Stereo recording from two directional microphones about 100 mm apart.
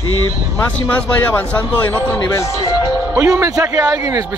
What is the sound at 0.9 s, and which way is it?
Speech, 20° left (ahead or behind).